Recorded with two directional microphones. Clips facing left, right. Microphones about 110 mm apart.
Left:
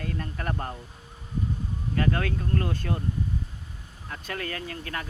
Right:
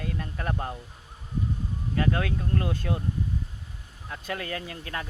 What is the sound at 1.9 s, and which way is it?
Speech, 15° right (ahead or behind).